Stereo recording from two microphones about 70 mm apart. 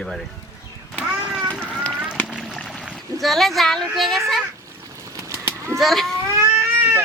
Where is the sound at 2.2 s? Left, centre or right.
Centre.